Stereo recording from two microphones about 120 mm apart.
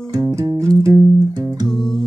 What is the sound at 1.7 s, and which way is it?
Music, 5° left (ahead or behind).